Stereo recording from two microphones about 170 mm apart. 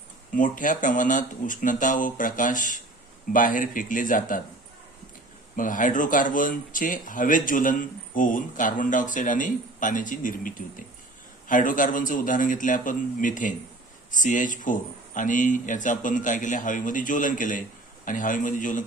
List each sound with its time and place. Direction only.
0.3 s speech: 50° left (ahead or behind)
5.5 s speech: 50° left (ahead or behind)